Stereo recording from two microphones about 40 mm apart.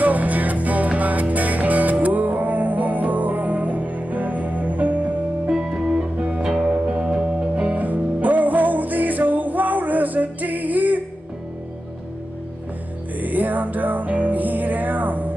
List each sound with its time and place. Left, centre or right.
0.0 s music: right
5.5 s music: centre
7.7 s music: right
13.2 s music: right